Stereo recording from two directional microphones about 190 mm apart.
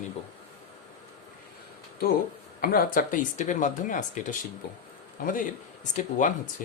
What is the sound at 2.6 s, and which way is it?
Speech, 50° left (ahead or behind).